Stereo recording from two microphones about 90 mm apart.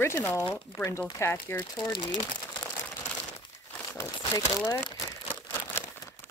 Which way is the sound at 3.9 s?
35° left (ahead or behind).